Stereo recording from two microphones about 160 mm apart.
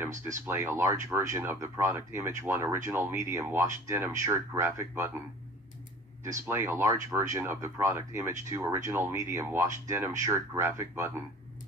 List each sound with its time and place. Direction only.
0.5 s speech: 15° right (ahead or behind)
6.2 s speech: 15° right (ahead or behind)